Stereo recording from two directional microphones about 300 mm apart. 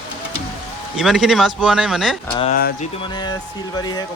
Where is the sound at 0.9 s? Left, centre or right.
Centre.